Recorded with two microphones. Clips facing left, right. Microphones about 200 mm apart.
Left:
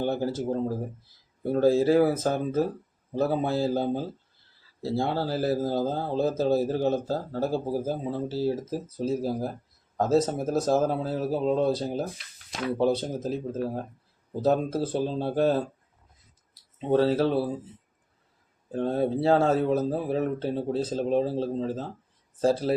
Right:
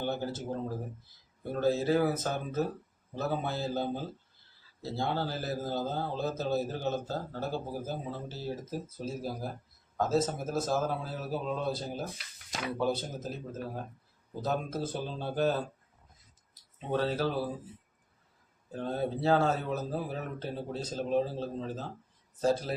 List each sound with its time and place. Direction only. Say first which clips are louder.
0.0 s a man's voice: left 7 dB; 35° left (ahead or behind)
1.5 s a man's voice: left 7 dB; 30° left (ahead or behind)
12.7 s a man's voice: left 7 dB; 30° left (ahead or behind)
16.9 s a man's voice: left 8 dB; 30° left (ahead or behind)
18.7 s a man's voice: left 7 dB; 30° left (ahead or behind)